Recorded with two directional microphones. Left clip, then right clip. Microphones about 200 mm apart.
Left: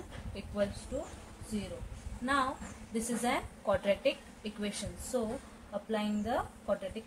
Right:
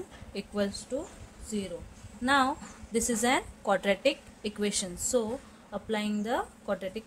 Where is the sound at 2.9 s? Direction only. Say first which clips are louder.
Right 6 dB; 55° right (ahead or behind).